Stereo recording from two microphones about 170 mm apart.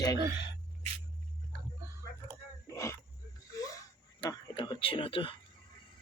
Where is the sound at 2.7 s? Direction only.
20° left (ahead or behind).